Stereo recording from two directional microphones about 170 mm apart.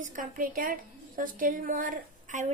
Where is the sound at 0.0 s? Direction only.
50° right (ahead or behind).